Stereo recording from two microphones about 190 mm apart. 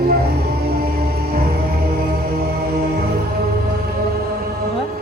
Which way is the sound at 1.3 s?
55° right (ahead or behind).